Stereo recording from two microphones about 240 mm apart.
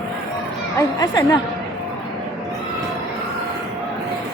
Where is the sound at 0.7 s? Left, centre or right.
Centre.